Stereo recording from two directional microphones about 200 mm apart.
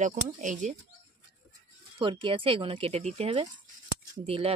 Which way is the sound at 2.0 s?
25° right (ahead or behind).